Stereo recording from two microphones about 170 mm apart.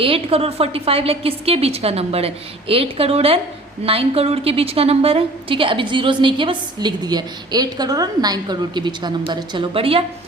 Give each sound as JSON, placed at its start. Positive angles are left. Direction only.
{"t": 0.0, "sound": "a woman's voice", "side_deg": -35}